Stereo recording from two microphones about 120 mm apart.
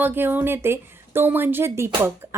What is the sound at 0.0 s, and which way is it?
Speech, 15° right (ahead or behind).